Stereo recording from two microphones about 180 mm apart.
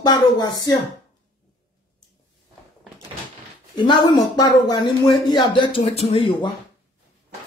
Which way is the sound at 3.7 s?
25° left (ahead or behind).